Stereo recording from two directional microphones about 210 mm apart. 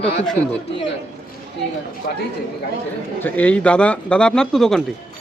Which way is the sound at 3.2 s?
5° left (ahead or behind).